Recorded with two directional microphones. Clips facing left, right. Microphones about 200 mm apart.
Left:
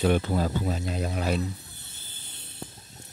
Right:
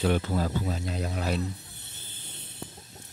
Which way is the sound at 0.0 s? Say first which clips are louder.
Left 2 dB; 20° left (ahead or behind).